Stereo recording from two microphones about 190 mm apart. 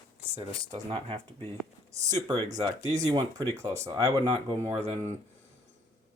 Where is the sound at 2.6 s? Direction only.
20° right (ahead or behind).